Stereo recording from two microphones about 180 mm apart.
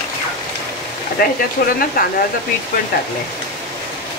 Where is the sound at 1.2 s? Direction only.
60° left (ahead or behind).